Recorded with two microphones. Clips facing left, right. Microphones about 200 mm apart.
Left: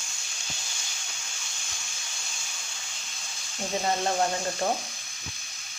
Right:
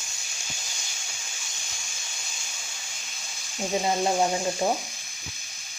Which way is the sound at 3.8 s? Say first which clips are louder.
Right 2 dB; 10° right (ahead or behind).